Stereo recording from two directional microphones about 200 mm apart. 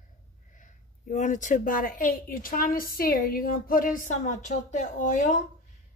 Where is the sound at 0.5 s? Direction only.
40° left (ahead or behind).